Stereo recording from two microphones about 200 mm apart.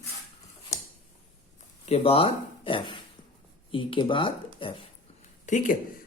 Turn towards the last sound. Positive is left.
turn(degrees=40)  # may be behind; listen again after turning